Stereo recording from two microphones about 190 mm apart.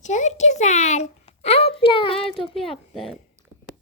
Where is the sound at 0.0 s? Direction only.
40° left (ahead or behind).